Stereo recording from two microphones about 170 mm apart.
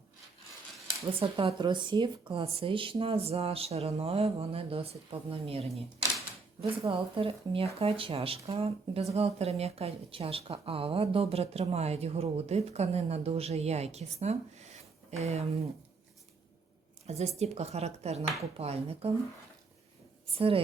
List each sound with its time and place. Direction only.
1.2 s speech: 30° right (ahead or behind)
17.1 s speech: 40° right (ahead or behind)
20.3 s speech: 35° right (ahead or behind)